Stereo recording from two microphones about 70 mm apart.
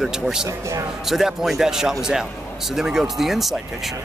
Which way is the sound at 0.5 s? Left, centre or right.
Right.